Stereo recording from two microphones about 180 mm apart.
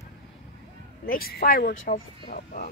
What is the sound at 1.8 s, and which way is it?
Speech, 40° left (ahead or behind).